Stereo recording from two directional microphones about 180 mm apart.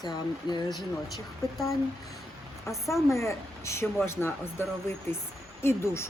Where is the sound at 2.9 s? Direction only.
15° left (ahead or behind).